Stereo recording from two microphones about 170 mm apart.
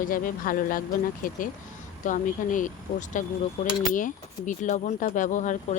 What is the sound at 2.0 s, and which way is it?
Speech, 50° left (ahead or behind).